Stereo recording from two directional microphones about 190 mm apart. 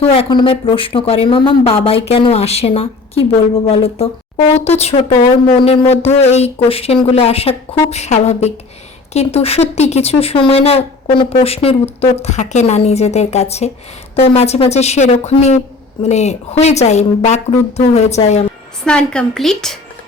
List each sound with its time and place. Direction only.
0.0 s speech: 30° left (ahead or behind)
18.9 s a woman's voice: 5° left (ahead or behind)